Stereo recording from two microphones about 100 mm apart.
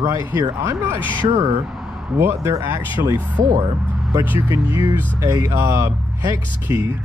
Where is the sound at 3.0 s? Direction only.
55° right (ahead or behind).